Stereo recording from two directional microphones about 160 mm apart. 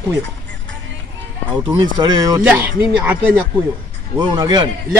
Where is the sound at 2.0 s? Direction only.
25° right (ahead or behind).